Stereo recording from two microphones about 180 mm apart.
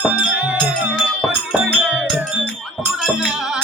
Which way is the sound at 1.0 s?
5° right (ahead or behind).